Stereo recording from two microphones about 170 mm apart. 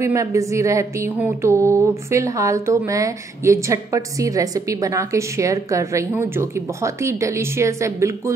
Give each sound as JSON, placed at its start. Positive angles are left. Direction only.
{"t": 0.0, "sound": "speech", "side_deg": -15}